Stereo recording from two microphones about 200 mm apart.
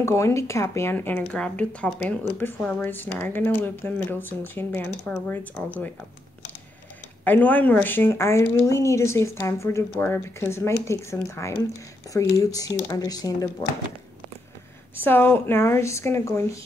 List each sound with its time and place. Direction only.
0.0 s speech: 15° left (ahead or behind)
7.2 s speech: 10° left (ahead or behind)
15.0 s speech: 10° left (ahead or behind)